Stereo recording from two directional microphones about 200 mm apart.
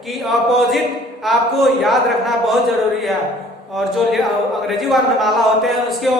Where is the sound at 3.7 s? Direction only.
Centre (ahead or behind).